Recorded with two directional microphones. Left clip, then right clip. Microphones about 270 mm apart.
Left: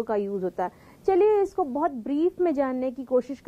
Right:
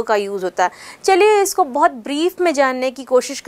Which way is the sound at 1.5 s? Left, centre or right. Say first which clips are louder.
Right 10 dB; centre.